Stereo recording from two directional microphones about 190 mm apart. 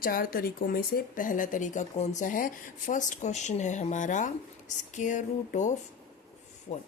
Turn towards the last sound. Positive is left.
turn(degrees=35)  # may be behind; listen again after turning